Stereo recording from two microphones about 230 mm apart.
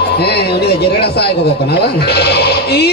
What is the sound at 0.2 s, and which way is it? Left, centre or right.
Speech, left.